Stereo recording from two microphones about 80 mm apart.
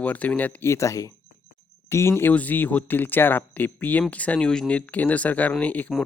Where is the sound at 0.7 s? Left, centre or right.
Left.